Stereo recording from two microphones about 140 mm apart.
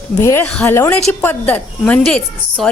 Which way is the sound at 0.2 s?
20° left (ahead or behind).